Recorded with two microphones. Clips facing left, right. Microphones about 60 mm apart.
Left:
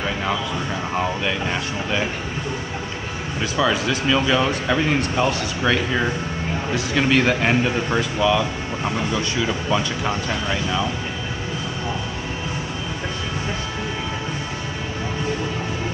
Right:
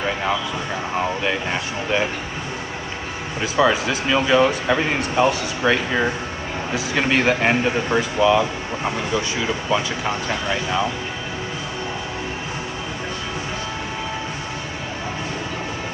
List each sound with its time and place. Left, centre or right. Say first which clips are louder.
1.2 s speech: right 1 dB; centre
3.5 s speech: right 3 dB; centre
9.7 s speech: even; centre